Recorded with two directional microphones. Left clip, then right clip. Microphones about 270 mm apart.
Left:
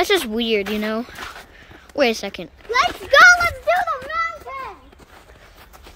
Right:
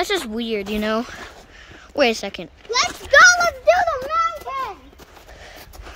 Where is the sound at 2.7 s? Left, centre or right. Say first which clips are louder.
Left 1 dB; left.